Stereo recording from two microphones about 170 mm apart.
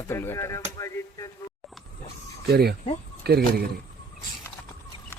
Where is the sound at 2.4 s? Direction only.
70° right (ahead or behind).